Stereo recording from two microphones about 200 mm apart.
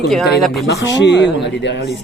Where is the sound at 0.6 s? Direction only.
60° left (ahead or behind).